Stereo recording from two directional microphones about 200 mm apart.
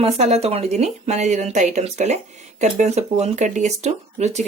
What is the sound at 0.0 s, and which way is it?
Speech, 30° right (ahead or behind).